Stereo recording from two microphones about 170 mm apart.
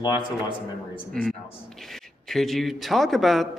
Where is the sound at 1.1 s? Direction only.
Centre (ahead or behind).